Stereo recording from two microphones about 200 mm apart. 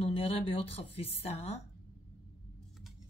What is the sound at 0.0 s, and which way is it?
Speech, 30° left (ahead or behind).